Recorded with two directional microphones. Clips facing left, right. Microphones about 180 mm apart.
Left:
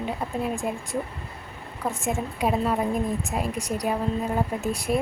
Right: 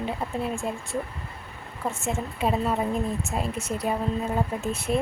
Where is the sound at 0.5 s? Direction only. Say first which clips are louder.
Left 1 dB; 15° left (ahead or behind).